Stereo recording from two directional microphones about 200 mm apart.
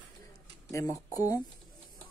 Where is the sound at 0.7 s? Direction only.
15° left (ahead or behind).